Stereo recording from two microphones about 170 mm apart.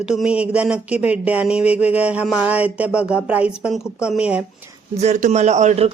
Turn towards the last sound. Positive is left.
turn(degrees=-40)  # may be behind; listen again after turning